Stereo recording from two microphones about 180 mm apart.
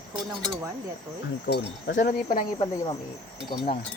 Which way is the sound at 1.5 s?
70° left (ahead or behind).